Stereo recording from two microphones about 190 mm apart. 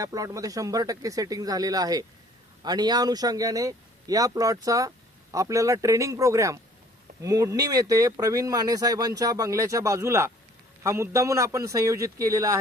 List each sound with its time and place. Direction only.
0.0 s a man's voice: 20° right (ahead or behind)